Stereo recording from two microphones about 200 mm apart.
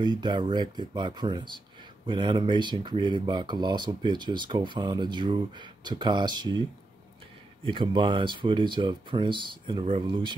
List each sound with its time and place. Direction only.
0.0 s speech: 20° right (ahead or behind)
7.6 s speech: 25° right (ahead or behind)